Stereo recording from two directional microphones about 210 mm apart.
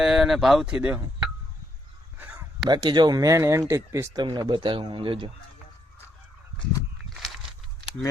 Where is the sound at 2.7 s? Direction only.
20° right (ahead or behind).